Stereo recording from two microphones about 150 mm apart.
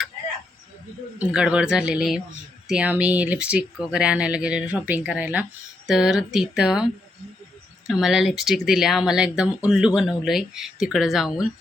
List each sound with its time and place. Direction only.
1.2 s speech: 5° right (ahead or behind)
7.9 s speech: 5° right (ahead or behind)